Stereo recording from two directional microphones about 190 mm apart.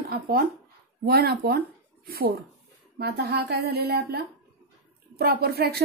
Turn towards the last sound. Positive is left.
turn(degrees=-55)  # may be behind; listen again after turning